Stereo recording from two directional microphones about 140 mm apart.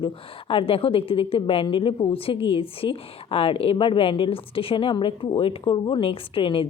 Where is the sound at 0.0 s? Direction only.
40° left (ahead or behind).